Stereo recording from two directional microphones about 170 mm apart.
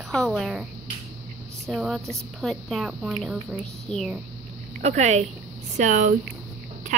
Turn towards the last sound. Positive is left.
turn(degrees=-50)  # may be behind; listen again after turning